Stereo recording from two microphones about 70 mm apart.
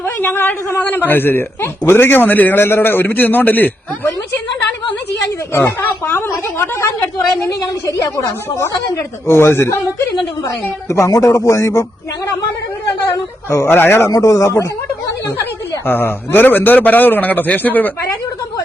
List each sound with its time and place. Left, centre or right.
0.0 s a man's voice: left
5.5 s speech: left
7.4 s speech: left
10.8 s speech: left
13.5 s speech: left
14.1 s speech: left
15.9 s a man's voice: left